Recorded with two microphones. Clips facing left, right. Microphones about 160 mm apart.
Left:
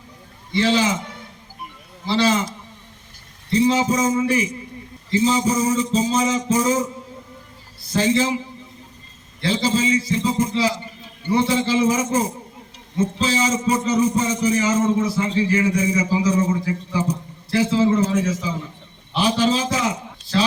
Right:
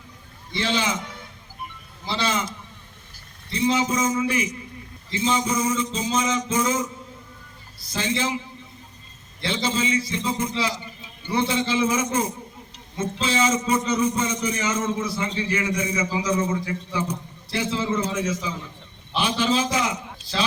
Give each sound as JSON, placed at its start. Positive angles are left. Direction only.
{"t": 2.0, "sound": "a man's voice", "side_deg": 40}
{"t": 3.5, "sound": "a man's voice", "side_deg": 40}
{"t": 7.9, "sound": "a man's voice", "side_deg": 40}
{"t": 9.4, "sound": "a man's voice", "side_deg": 40}